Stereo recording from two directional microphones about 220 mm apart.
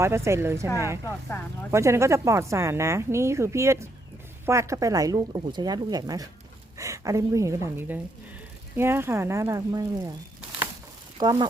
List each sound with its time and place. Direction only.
0.0 s speech: 10° right (ahead or behind)
1.7 s speech: 15° right (ahead or behind)
11.2 s speech: 15° right (ahead or behind)